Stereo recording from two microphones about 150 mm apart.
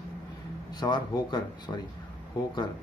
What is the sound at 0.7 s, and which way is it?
Speech, 30° left (ahead or behind).